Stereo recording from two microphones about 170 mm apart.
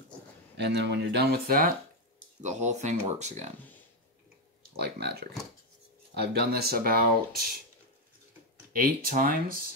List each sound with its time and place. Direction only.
0.6 s speech: 80° right; by 1.7 s 65° right (ahead or behind)
2.4 s speech: 45° right (ahead or behind)
4.7 s speech: 70° right (ahead or behind)
8.7 s speech: 55° right (ahead or behind)